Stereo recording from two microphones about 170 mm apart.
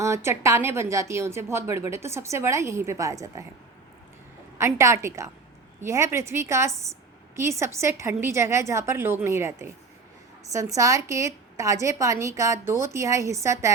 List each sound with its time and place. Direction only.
0.0 s speech: 15° right (ahead or behind)
4.5 s speech: 15° right (ahead or behind)